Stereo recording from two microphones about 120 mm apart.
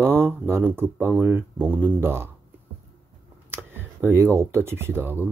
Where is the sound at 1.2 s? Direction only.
15° right (ahead or behind).